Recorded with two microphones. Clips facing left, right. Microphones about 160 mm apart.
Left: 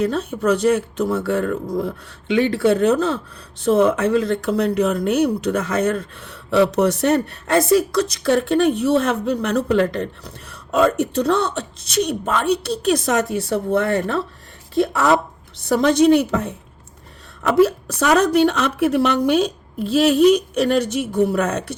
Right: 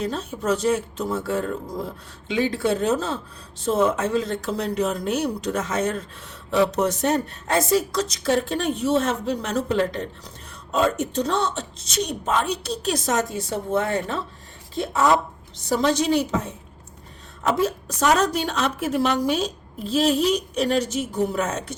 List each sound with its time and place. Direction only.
0.0 s speech: 60° left (ahead or behind)